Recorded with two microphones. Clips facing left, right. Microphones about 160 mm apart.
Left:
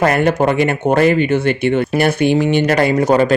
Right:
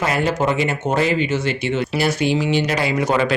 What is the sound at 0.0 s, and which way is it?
Speech, 55° left (ahead or behind).